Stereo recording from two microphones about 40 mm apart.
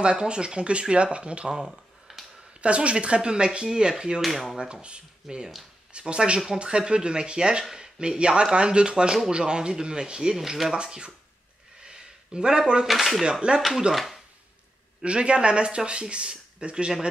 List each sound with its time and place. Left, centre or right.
0.0 s speech: right
1.5 s a sound: centre
2.6 s speech: right
4.2 s speech: centre
5.3 s speech: centre
5.9 s speech: right
10.3 s speech: centre
10.8 s speech: right
11.8 s a sound: centre
12.8 s speech: centre
13.2 s speech: right
13.6 s speech: centre
15.0 s speech: right